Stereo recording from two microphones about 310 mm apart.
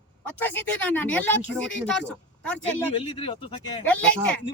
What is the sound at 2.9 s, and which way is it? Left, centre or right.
Speech, centre.